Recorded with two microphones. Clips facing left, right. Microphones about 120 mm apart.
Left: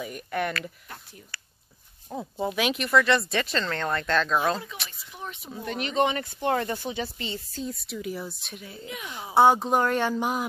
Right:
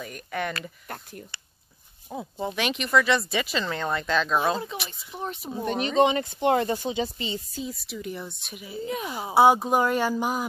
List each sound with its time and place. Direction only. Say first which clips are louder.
0.0 s speech: left 2 dB; centre (ahead or behind)
0.8 s speech: right 6 dB; 55° right (ahead or behind)
2.3 s speech: left 2 dB; centre (ahead or behind)
5.1 s speech: right 6 dB; 35° right (ahead or behind)
5.7 s speech: right 4 dB; 25° right (ahead or behind)
7.6 s speech: left 1 dB; centre (ahead or behind)
8.8 s speech: right 9 dB; 35° right (ahead or behind)
9.3 s speech: right 1 dB; 5° right (ahead or behind)